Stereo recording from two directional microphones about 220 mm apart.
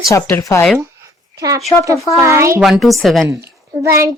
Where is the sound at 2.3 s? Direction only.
10° right (ahead or behind).